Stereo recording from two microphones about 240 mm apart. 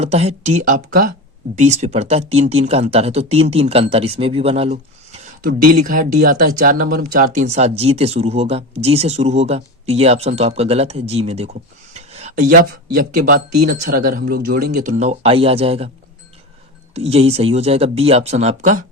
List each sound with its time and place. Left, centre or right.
0.0 s speech: right
16.9 s speech: right